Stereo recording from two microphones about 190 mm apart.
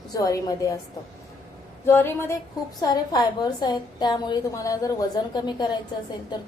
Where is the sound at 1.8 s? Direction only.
10° left (ahead or behind).